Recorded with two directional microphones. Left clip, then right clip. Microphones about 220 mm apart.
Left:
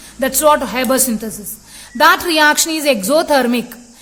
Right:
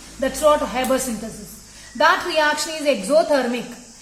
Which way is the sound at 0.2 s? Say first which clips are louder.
Left 4 dB; 50° left (ahead or behind).